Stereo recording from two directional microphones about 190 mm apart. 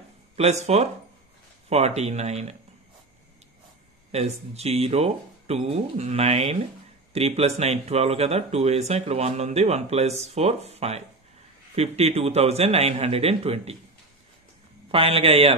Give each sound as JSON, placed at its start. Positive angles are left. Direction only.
{"t": 0.4, "sound": "speech", "side_deg": -35}
{"t": 4.1, "sound": "speech", "side_deg": -35}
{"t": 14.9, "sound": "speech", "side_deg": -30}